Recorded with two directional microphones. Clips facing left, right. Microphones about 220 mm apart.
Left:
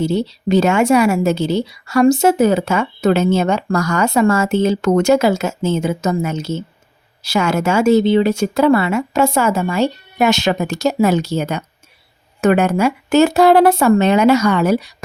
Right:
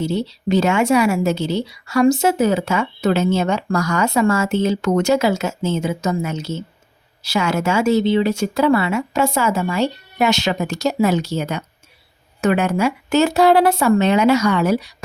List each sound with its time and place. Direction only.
0.1 s a woman's voice: 45° left (ahead or behind)